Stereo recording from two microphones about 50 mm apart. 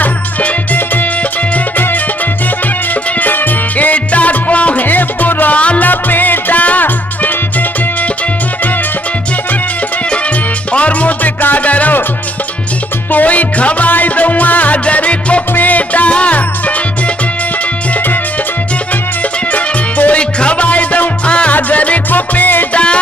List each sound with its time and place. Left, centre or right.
0.0 s music: left
2.9 s music: left
5.6 s music: left
5.9 s music: left
10.7 s music: left
13.1 s music: left
19.5 s music: left
20.2 s music: left